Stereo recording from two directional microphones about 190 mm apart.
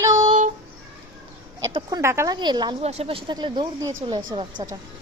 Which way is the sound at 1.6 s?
20° right (ahead or behind).